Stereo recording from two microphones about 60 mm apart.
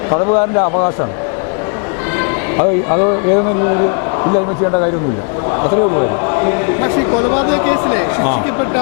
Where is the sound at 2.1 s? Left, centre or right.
Left.